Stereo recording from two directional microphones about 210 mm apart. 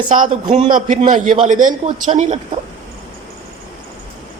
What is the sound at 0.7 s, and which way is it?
A man's voice, 40° right (ahead or behind).